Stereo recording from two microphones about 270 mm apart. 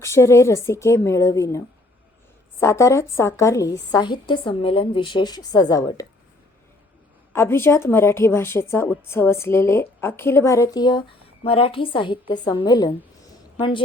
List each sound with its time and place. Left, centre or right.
0.0 s speech: centre
7.3 s a woman's voice: centre